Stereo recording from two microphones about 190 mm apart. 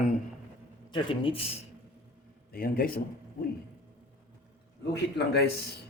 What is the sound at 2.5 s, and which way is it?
Speech, 50° left (ahead or behind).